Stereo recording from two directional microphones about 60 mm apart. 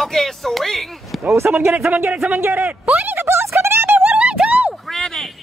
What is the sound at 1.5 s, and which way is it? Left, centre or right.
Speech, right.